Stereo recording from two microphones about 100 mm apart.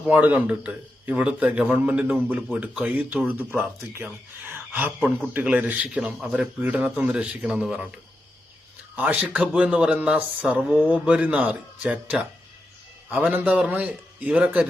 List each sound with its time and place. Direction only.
0.0 s speech: 15° right (ahead or behind)
9.0 s speech: 15° right (ahead or behind)